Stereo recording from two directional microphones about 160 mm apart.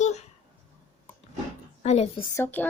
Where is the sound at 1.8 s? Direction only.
40° left (ahead or behind).